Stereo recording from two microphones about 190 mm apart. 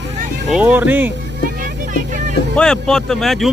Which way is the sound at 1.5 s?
45° right (ahead or behind).